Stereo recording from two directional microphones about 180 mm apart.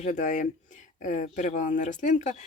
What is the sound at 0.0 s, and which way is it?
Speech, 45° left (ahead or behind).